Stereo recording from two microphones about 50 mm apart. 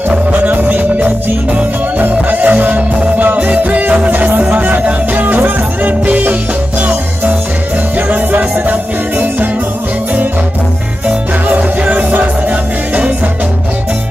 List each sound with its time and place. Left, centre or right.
0.1 s music: right
8.1 s music: right
11.4 s music: right